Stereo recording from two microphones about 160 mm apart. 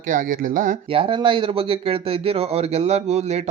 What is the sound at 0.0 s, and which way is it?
Speech, 55° right (ahead or behind).